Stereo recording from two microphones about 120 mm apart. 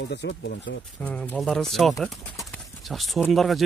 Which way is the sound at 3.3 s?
Centre (ahead or behind).